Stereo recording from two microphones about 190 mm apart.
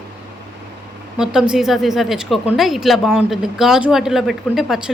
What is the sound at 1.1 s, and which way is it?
Speech, 5° right (ahead or behind).